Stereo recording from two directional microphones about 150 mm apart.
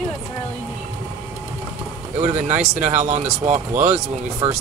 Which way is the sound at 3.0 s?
50° right (ahead or behind).